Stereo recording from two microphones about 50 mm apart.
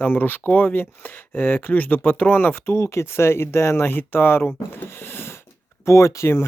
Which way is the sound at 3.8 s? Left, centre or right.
Left.